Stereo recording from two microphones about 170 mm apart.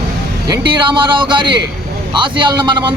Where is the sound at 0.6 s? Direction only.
30° right (ahead or behind).